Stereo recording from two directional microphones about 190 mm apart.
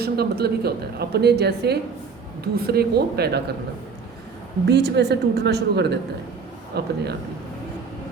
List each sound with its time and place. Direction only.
0.0 s a woman's voice: 55° right (ahead or behind)
4.6 s a woman's voice: 60° right (ahead or behind)